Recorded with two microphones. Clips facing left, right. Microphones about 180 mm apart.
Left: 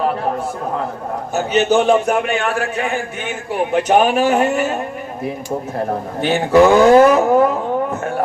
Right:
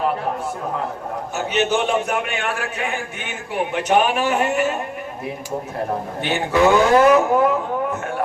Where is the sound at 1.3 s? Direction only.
40° left (ahead or behind).